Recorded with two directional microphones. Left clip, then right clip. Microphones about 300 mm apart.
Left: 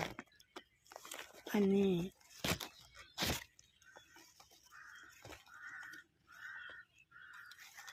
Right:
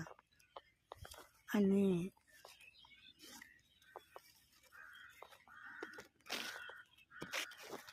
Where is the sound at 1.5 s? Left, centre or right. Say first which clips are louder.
Left 2 dB; centre.